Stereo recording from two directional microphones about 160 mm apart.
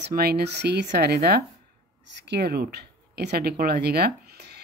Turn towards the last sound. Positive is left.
turn(degrees=-90)